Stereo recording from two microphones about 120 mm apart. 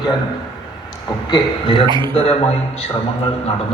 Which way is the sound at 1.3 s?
45° left (ahead or behind).